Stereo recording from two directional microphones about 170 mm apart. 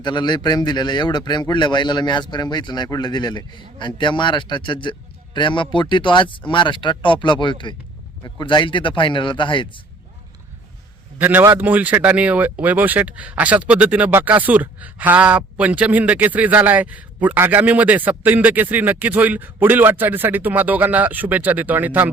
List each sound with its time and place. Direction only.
0.0 s a man's voice: 25° left (ahead or behind)
11.2 s speech: 10° right (ahead or behind)